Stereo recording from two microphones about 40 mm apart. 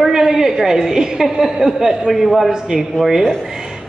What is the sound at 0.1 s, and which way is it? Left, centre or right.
A woman's voice, centre.